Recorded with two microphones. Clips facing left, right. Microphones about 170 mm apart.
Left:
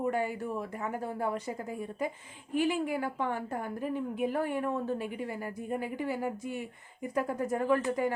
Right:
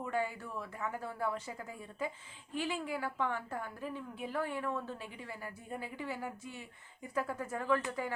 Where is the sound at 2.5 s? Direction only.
15° left (ahead or behind).